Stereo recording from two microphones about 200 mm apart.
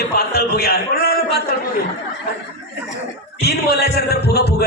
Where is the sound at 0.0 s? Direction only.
50° left (ahead or behind).